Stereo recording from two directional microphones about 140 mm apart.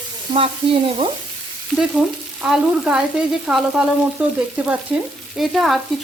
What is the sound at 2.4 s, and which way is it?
Frying, 5° right (ahead or behind).